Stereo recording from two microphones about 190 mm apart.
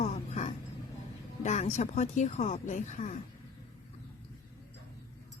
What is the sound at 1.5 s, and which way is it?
Speech, 40° left (ahead or behind).